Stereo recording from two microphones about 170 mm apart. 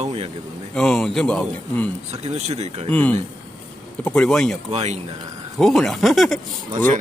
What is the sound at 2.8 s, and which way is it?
Speech, 10° left (ahead or behind).